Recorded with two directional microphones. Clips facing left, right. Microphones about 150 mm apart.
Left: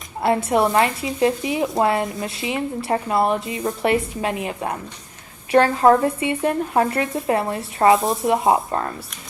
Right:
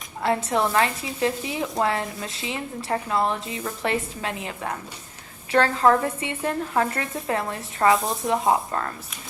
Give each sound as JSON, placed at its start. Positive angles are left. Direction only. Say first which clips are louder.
{"t": 0.4, "sound": "speech", "louder": "left 5 dB", "side_deg": 15}